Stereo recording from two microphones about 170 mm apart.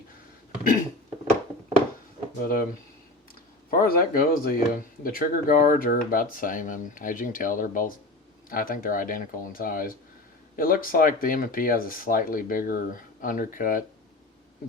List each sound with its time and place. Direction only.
2.4 s speech: 60° left (ahead or behind)
3.7 s speech: 60° left (ahead or behind)